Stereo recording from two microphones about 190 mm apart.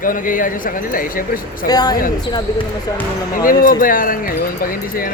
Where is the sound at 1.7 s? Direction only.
20° left (ahead or behind).